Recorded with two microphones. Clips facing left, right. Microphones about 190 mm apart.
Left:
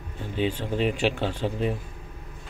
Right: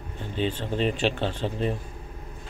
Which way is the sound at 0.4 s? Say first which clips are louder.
Left 1 dB; 10° left (ahead or behind).